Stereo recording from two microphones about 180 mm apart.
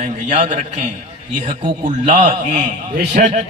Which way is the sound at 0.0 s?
40° right (ahead or behind).